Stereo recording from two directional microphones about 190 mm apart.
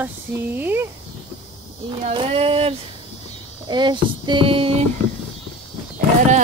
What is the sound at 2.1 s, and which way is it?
Speech, 30° right (ahead or behind).